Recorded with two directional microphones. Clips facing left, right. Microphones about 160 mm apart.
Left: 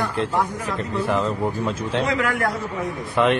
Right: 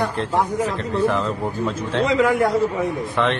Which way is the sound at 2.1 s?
25° right (ahead or behind).